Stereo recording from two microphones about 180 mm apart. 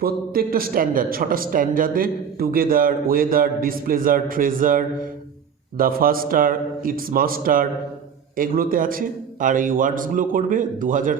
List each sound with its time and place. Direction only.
0.0 s speech: 55° right (ahead or behind)